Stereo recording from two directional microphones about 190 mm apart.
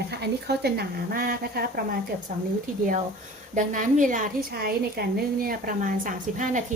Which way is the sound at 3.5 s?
40° right (ahead or behind).